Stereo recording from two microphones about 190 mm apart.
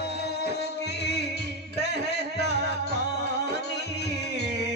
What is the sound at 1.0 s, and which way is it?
Music, 60° left (ahead or behind).